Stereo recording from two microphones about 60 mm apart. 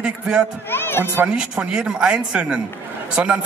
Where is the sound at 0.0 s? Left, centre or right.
Centre.